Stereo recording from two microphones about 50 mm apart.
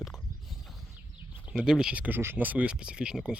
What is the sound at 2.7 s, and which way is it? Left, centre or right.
Speech, centre.